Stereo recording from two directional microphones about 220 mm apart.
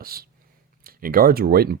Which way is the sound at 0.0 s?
40° right (ahead or behind).